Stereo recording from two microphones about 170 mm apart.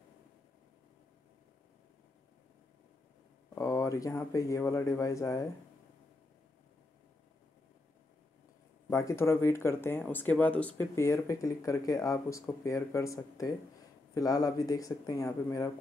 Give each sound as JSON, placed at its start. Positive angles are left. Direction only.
{"t": 3.5, "sound": "speech", "side_deg": 15}
{"t": 8.9, "sound": "speech", "side_deg": 15}